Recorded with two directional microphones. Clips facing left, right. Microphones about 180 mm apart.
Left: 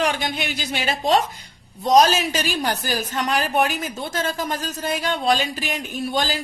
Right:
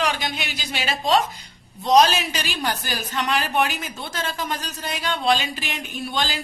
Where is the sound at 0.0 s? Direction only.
50° left (ahead or behind).